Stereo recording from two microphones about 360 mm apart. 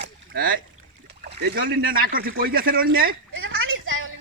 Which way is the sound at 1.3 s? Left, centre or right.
Right.